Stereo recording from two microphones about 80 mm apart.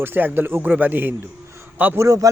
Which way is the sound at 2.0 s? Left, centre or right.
Right.